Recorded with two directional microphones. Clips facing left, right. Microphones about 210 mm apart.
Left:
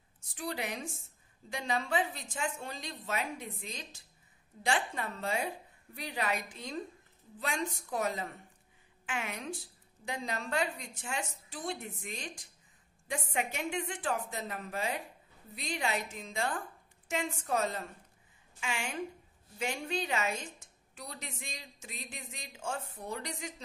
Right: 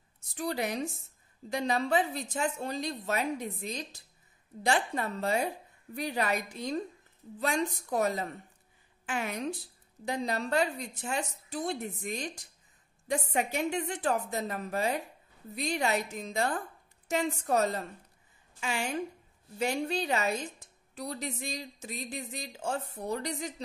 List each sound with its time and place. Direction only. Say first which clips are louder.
0.4 s a woman's voice: right 6 dB; 40° right (ahead or behind)